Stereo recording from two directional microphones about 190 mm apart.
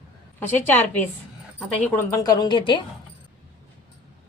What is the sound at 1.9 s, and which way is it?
Speech, 15° left (ahead or behind).